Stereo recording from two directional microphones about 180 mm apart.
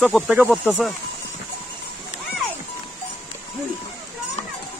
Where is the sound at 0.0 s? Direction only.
5° right (ahead or behind).